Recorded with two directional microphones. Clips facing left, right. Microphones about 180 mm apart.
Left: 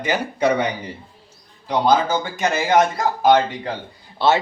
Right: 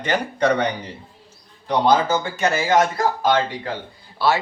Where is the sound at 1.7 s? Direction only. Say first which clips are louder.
Even; 15° left (ahead or behind).